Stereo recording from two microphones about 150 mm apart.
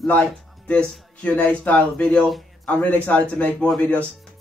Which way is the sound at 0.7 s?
10° left (ahead or behind).